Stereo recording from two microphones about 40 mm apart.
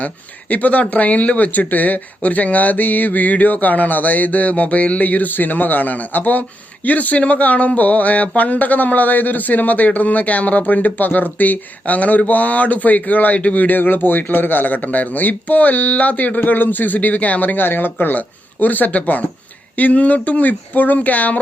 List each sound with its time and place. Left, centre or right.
0.0 s speech: left
18.1 s speech: left